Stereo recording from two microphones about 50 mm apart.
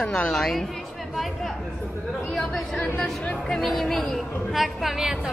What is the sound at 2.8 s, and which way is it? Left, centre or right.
Speech, left.